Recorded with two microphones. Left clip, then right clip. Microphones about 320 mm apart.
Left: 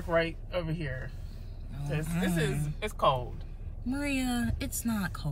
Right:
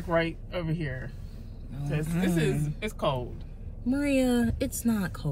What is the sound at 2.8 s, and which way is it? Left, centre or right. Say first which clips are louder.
Speech: left 5 dB; left.